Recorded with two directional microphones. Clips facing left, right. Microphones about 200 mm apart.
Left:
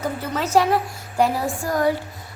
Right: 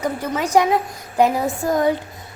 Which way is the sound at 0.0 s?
15° right (ahead or behind).